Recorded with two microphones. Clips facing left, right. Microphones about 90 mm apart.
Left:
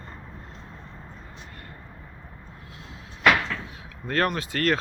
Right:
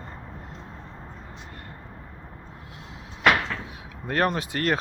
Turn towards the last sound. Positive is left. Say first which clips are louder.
# even
turn(degrees=-20)  # may be behind; listen again after turning